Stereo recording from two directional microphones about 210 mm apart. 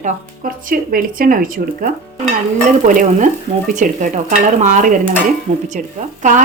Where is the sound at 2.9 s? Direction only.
40° right (ahead or behind).